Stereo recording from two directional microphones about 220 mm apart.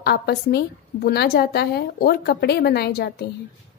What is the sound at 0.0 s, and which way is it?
A woman's voice, 45° left (ahead or behind).